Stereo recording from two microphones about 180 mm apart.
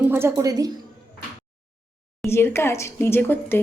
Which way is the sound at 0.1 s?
15° right (ahead or behind).